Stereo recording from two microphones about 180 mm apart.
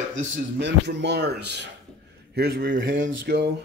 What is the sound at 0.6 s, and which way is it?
Speech, 75° right (ahead or behind).